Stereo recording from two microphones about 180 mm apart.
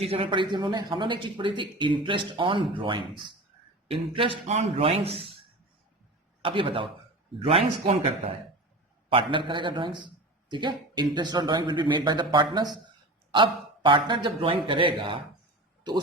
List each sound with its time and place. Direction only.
0.0 s a man's voice: 30° right (ahead or behind)
6.4 s a man's voice: 30° right (ahead or behind)